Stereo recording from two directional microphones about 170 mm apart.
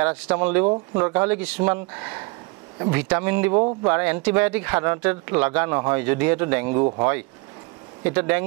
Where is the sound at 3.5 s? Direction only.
20° right (ahead or behind).